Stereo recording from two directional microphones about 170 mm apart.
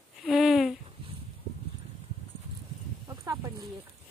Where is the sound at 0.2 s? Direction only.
Centre (ahead or behind).